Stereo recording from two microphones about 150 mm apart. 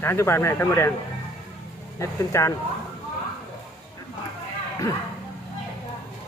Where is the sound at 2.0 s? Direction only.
20° left (ahead or behind).